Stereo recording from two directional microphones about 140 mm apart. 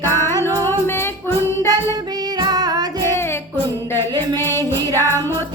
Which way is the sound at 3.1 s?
20° left (ahead or behind).